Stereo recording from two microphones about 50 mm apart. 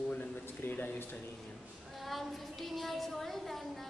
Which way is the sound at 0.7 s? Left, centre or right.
Left.